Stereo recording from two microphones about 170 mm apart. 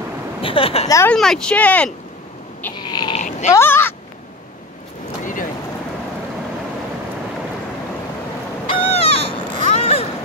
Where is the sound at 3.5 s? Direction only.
15° left (ahead or behind).